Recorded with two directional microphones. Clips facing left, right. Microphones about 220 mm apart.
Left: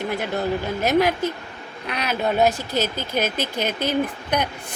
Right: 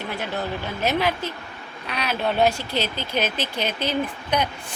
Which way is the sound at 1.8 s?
55° left (ahead or behind).